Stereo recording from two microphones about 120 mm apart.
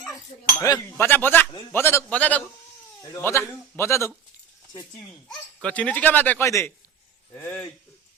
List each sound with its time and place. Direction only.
0.6 s speech: 25° left (ahead or behind)
3.0 s a man's voice: 25° left (ahead or behind)
5.6 s speech: 10° left (ahead or behind)
6.4 s speech: 25° left (ahead or behind)